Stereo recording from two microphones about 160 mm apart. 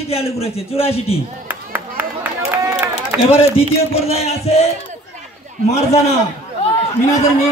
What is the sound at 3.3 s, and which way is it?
A man's voice, 35° left (ahead or behind).